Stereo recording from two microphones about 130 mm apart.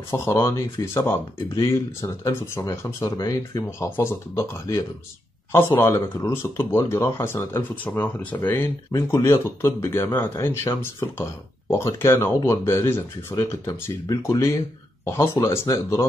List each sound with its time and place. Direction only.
0.1 s speech: 20° left (ahead or behind)